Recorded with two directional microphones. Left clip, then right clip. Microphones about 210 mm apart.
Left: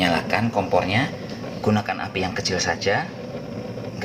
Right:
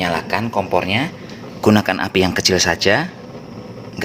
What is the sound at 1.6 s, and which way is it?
Speech, 50° right (ahead or behind).